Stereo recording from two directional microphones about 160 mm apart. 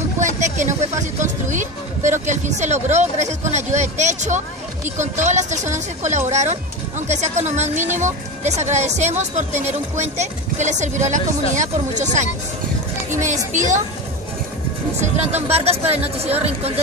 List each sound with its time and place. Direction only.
0.2 s speech: 50° right (ahead or behind)
13.5 s speech: 50° right (ahead or behind)
15.0 s speech: 45° right (ahead or behind)